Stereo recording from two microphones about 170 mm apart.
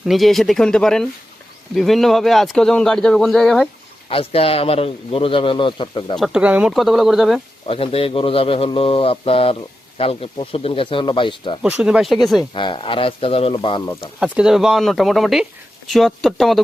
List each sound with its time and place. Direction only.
0.0 s a man's voice: centre (ahead or behind)
4.1 s a man's voice: 35° left (ahead or behind)
6.1 s a man's voice: centre (ahead or behind)
7.7 s a man's voice: 35° left (ahead or behind)
11.6 s a man's voice: 5° right (ahead or behind)
12.5 s a man's voice: 30° left (ahead or behind)
14.2 s a man's voice: 5° right (ahead or behind)